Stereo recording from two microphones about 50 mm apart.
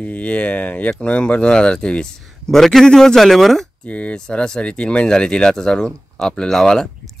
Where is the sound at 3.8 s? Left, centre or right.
Left.